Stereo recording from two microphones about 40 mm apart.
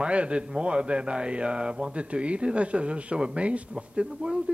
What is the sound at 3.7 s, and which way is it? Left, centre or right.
Speech, centre.